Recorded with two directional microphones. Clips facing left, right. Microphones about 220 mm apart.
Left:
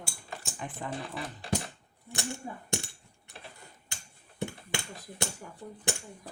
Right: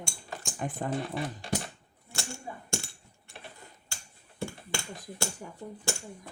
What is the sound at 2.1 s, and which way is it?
Coin, 20° left (ahead or behind).